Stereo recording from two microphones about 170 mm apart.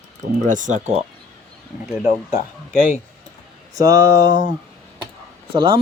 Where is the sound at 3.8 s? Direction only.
20° right (ahead or behind).